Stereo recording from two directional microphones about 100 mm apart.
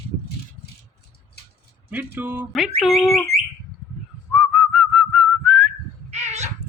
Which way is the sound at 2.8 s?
Centre (ahead or behind).